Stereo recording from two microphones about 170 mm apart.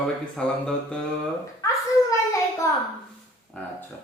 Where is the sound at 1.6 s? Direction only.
20° left (ahead or behind).